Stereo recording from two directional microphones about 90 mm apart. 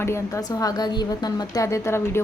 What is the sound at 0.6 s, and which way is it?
A woman's voice, 50° left (ahead or behind).